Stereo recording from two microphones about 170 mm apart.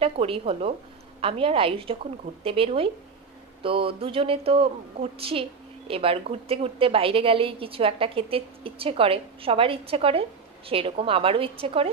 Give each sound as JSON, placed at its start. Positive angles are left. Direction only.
{"t": 0.0, "sound": "a woman's voice", "side_deg": -35}